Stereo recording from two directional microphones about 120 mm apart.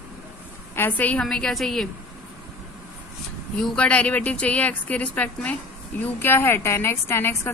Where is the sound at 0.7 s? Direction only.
15° left (ahead or behind).